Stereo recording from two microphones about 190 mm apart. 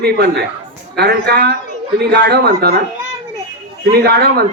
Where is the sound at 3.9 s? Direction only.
55° right (ahead or behind).